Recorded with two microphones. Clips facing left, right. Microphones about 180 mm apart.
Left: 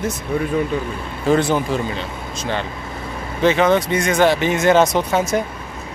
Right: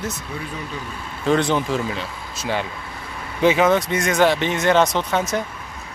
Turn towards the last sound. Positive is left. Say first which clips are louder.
# left 4 dB
turn(degrees=10)  # may be behind; listen again after turning